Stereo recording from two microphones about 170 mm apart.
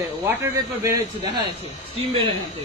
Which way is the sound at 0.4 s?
20° right (ahead or behind).